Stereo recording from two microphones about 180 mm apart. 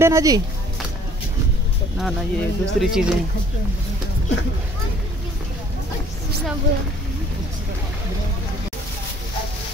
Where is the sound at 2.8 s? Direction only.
5° right (ahead or behind).